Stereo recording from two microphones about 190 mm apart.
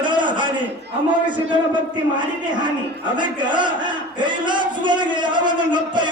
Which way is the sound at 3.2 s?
25° right (ahead or behind).